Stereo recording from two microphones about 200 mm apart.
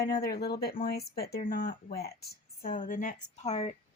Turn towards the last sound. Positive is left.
turn(degrees=30)  # may be behind; listen again after turning